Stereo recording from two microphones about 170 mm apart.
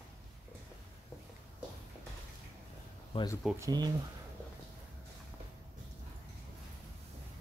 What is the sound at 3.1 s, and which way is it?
Speech, 25° left (ahead or behind).